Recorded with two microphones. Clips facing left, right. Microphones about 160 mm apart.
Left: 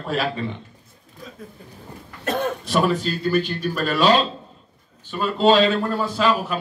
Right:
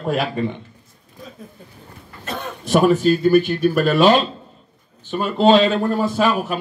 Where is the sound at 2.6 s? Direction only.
45° right (ahead or behind).